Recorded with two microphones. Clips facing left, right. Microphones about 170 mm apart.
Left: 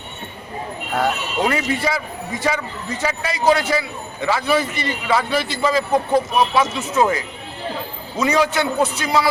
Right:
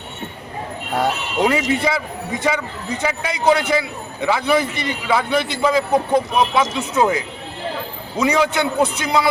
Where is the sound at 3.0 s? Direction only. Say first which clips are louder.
Even; 15° right (ahead or behind).